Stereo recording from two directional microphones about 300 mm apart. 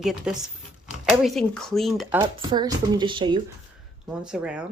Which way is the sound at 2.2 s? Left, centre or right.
Centre.